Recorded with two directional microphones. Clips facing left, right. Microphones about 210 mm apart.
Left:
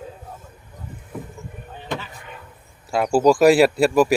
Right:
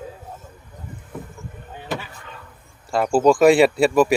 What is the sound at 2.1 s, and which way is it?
Chop, 15° left (ahead or behind).